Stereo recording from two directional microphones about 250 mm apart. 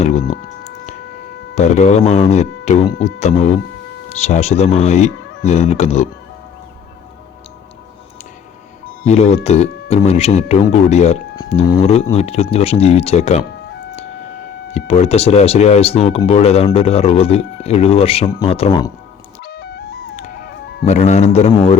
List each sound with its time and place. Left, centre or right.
1.5 s speech: left
9.0 s speech: left
14.7 s speech: left
19.4 s music: left
20.8 s speech: left